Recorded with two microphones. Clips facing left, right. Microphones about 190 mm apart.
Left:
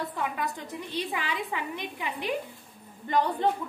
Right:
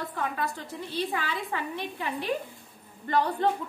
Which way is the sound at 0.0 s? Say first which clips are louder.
Even; 15° left (ahead or behind).